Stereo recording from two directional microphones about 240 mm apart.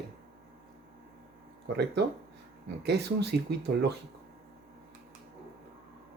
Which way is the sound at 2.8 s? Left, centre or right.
Right.